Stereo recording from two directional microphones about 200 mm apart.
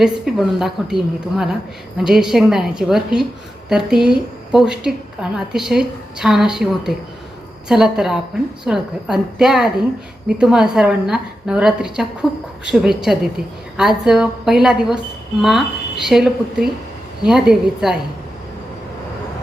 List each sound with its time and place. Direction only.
0.0 s a woman's voice: centre (ahead or behind)
12.3 s a woman's voice: 20° left (ahead or behind)
12.8 s a woman's voice: centre (ahead or behind)